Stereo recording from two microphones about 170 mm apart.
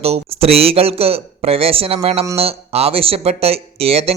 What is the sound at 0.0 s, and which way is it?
A man's voice, 35° right (ahead or behind).